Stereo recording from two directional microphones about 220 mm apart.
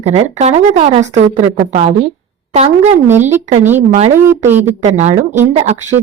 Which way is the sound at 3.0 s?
10° right (ahead or behind).